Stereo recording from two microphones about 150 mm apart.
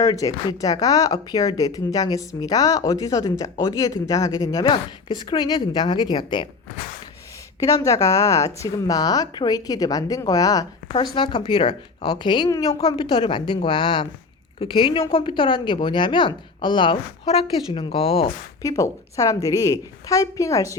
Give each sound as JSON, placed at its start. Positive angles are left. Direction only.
{"t": 0.0, "sound": "speech", "side_deg": 25}
{"t": 7.6, "sound": "speech", "side_deg": 20}
{"t": 18.6, "sound": "speech", "side_deg": 20}